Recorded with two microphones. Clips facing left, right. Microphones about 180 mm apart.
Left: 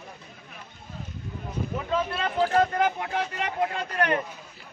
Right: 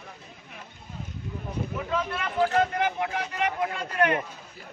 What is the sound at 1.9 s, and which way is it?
Speech, 30° left (ahead or behind).